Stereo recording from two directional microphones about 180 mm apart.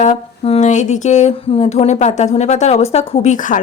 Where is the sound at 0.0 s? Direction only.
35° left (ahead or behind).